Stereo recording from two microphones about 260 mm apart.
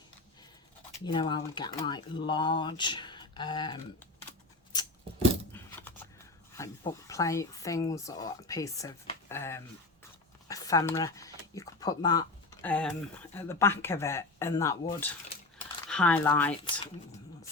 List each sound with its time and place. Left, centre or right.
1.0 s speech: centre
4.7 s a sound: centre
6.6 s speech: centre